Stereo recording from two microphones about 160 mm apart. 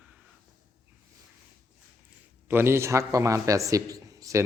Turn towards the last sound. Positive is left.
turn(degrees=-20)  # may be behind; listen again after turning